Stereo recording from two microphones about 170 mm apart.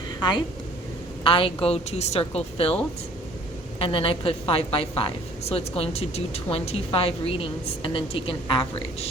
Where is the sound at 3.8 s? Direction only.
30° left (ahead or behind).